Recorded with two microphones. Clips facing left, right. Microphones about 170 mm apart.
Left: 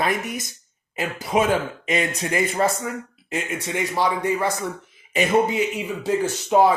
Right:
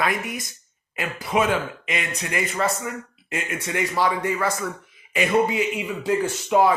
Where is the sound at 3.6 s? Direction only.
20° left (ahead or behind).